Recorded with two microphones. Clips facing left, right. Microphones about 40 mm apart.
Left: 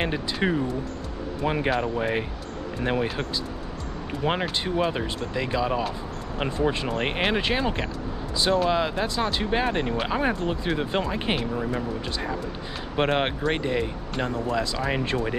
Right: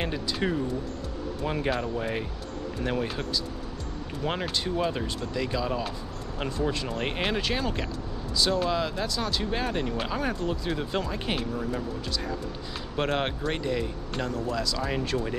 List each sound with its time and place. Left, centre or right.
0.0 s speech: left